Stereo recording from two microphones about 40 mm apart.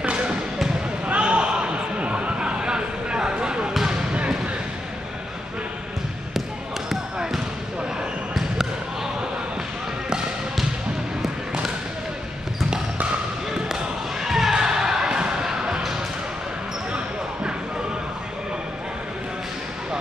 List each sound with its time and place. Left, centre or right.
0.0 s basketball bounce: right
1.0 s a sound: right
3.7 s basketball bounce: centre
4.1 s a sound: right
8.4 s basketball bounce: centre
14.2 s basketball bounce: centre
16.9 s basketball bounce: right